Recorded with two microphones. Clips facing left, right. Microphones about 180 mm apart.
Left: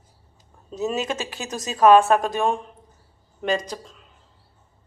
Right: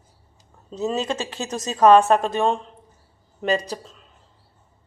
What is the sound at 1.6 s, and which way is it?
A woman's voice, centre (ahead or behind).